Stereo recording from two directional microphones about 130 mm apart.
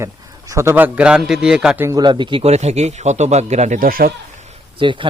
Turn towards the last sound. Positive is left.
turn(degrees=-40)  # may be behind; listen again after turning